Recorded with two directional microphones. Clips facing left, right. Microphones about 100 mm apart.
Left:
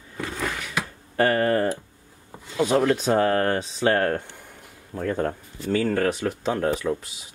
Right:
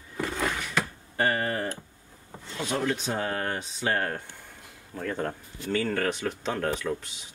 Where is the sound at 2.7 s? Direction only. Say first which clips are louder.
Left 8 dB; 60° left (ahead or behind).